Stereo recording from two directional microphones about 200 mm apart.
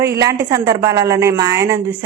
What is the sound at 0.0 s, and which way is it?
A woman's voice, 15° right (ahead or behind).